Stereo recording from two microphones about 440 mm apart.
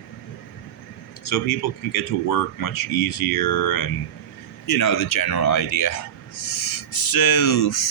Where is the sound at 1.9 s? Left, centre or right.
Left.